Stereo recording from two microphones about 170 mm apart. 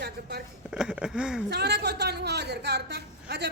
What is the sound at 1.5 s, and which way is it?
A woman's voice, 80° right.